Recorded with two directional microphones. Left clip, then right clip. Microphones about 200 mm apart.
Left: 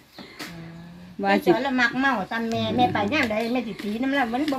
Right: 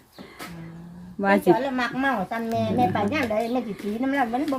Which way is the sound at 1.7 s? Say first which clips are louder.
Left 3 dB; 25° right (ahead or behind).